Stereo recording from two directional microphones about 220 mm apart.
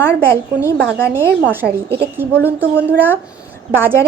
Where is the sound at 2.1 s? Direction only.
10° right (ahead or behind).